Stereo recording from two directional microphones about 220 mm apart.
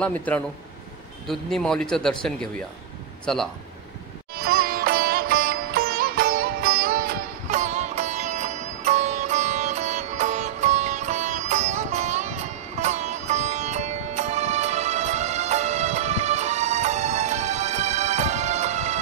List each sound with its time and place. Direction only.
0.0 s a man's voice: 5° left (ahead or behind)
3.3 s a man's voice: 5° left (ahead or behind)
4.4 s sitar: 45° right (ahead or behind)